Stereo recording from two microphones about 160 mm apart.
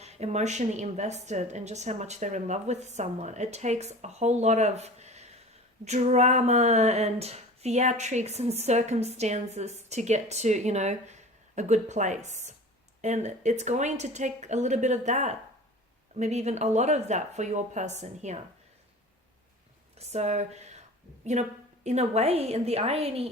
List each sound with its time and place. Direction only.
0.0 s a sound: 45° right (ahead or behind)
20.0 s speech: 45° right (ahead or behind)
21.8 s a woman's voice: 45° right (ahead or behind)